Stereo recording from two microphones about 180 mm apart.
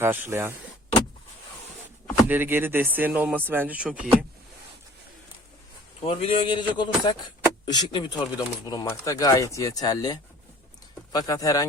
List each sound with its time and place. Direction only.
0.0 s speech: 10° right (ahead or behind)
2.1 s speech: 10° right (ahead or behind)
6.0 s speech: 35° left (ahead or behind)